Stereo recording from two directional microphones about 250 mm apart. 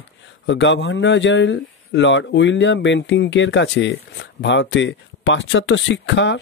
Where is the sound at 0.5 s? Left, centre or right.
Left.